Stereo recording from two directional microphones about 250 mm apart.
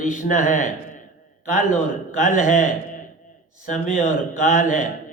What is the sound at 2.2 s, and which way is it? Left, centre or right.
Speech, left.